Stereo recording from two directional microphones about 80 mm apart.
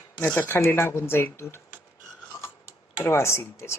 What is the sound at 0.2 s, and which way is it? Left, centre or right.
Speech, centre.